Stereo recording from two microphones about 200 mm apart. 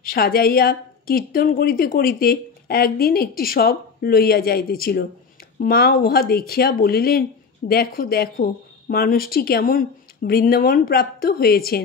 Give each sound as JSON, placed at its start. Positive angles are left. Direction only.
{"t": 0.0, "sound": "speech", "side_deg": 50}